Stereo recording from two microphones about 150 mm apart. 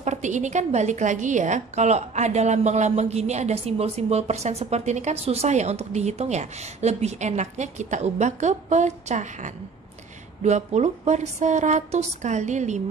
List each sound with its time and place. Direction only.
0.0 s a woman's voice: 50° right (ahead or behind)